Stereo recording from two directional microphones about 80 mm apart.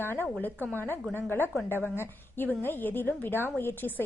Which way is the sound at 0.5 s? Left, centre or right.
Right.